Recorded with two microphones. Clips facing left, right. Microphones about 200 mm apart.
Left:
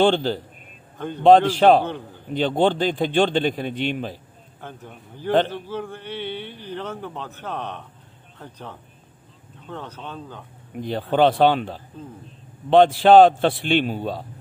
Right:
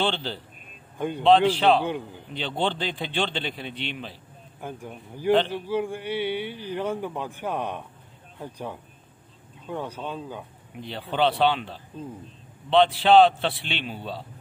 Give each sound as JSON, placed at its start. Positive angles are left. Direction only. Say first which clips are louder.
{"t": 0.0, "sound": "speech", "louder": "left 9 dB", "side_deg": 45}
{"t": 0.9, "sound": "speech", "louder": "right 2 dB", "side_deg": -10}
{"t": 1.2, "sound": "speech", "louder": "left 5 dB", "side_deg": 45}
{"t": 4.6, "sound": "speech", "louder": "right 3 dB", "side_deg": -10}
{"t": 10.8, "sound": "speech", "louder": "left 6 dB", "side_deg": 45}